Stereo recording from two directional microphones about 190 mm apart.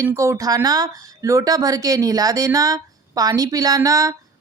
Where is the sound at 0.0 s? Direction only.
15° right (ahead or behind).